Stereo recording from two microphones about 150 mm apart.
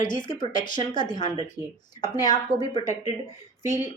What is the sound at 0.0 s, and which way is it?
A woman's voice, 30° left (ahead or behind).